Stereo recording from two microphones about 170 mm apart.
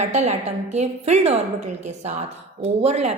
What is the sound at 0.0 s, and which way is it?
A woman's voice, 40° right (ahead or behind).